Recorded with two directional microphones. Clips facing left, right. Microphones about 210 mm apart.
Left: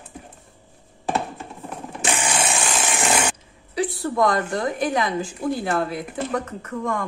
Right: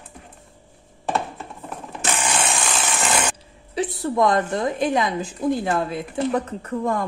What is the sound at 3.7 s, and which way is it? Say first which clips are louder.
A woman's voice: right 1 dB; 20° right (ahead or behind).